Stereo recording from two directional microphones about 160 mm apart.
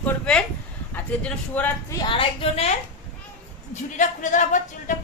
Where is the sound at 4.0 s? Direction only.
50° left (ahead or behind).